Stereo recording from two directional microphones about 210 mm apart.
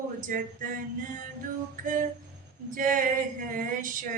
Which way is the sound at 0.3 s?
40° right (ahead or behind).